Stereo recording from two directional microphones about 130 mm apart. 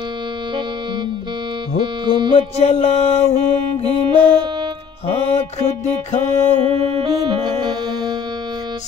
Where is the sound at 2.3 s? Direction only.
55° left (ahead or behind).